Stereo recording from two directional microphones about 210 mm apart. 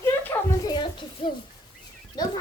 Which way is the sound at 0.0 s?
15° left (ahead or behind).